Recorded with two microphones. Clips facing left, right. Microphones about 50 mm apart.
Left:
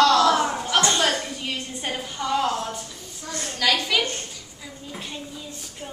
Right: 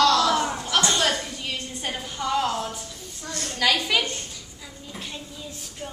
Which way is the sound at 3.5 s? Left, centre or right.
Centre.